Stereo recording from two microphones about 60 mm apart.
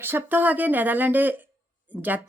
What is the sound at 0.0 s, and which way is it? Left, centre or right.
Speech, right.